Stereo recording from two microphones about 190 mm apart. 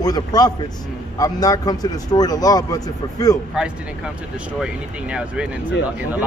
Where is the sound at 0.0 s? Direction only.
20° left (ahead or behind).